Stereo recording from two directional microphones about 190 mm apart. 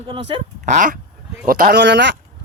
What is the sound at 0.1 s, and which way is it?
Speech, 25° right (ahead or behind).